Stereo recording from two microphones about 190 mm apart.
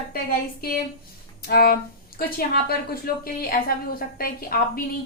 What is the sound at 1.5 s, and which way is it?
Speech, 50° left (ahead or behind).